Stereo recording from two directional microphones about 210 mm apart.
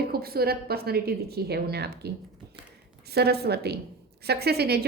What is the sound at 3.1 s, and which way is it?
A woman's voice, 50° right (ahead or behind).